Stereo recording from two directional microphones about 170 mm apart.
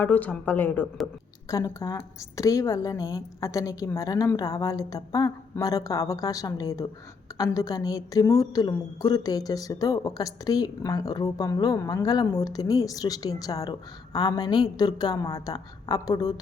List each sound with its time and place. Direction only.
0.0 s a woman's voice: 10° left (ahead or behind)
1.5 s a woman's voice: 20° left (ahead or behind)